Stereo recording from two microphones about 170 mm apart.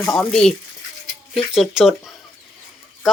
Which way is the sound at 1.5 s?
Centre (ahead or behind).